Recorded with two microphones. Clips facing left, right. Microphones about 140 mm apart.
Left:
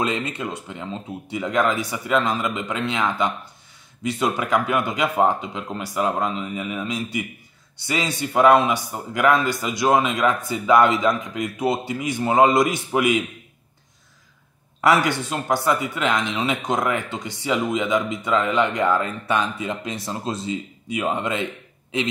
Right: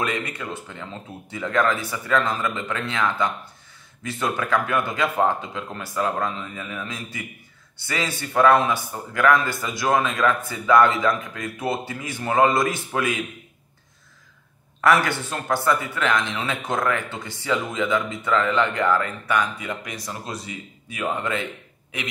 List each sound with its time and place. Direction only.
0.0 s a man's voice: 20° left (ahead or behind)
14.8 s speech: 15° left (ahead or behind)